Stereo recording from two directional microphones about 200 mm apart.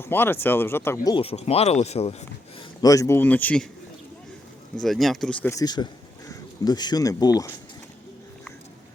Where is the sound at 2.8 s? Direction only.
15° left (ahead or behind).